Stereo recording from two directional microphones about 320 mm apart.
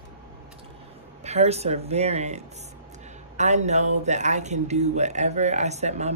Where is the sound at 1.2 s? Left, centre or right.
Centre.